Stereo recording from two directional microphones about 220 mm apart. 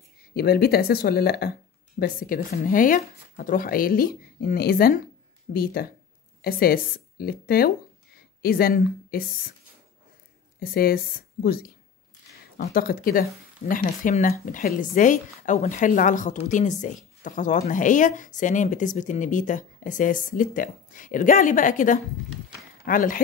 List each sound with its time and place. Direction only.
0.3 s a woman's voice: 45° left (ahead or behind)
10.6 s a woman's voice: 45° left (ahead or behind)